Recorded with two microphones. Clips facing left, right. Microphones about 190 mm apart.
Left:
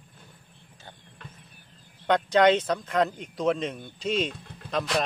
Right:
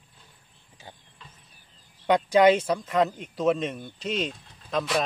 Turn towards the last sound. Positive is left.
turn(degrees=0)  # may be behind; listen again after turning